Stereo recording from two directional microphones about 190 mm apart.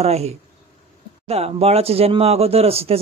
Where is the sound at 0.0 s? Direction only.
35° right (ahead or behind).